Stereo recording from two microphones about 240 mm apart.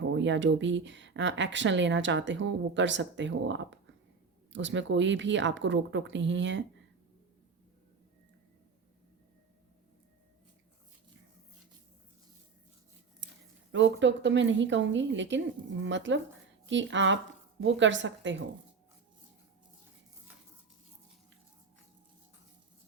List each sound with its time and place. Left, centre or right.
0.1 s speech: right
13.7 s speech: right